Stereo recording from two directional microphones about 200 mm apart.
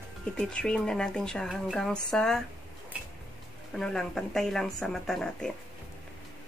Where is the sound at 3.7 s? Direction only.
Centre (ahead or behind).